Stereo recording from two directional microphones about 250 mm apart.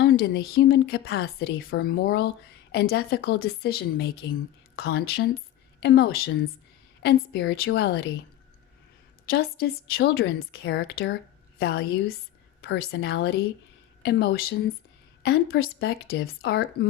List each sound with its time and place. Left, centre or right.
0.0 s a woman's voice: left
9.3 s a woman's voice: left